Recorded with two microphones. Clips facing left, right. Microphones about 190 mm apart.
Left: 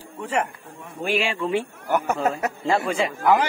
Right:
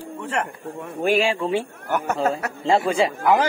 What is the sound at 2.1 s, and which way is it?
Speech, 35° right (ahead or behind).